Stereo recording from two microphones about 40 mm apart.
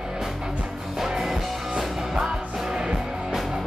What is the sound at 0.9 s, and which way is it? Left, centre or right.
Music, centre.